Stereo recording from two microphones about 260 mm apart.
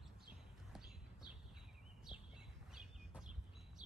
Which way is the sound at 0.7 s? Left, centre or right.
Centre.